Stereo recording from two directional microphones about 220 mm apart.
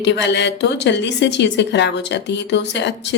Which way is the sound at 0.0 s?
50° left (ahead or behind).